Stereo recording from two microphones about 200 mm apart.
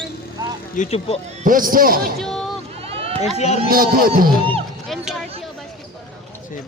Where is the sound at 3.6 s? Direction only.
45° right (ahead or behind).